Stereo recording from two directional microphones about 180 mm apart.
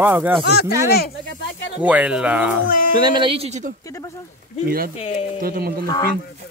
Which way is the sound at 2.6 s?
50° left (ahead or behind).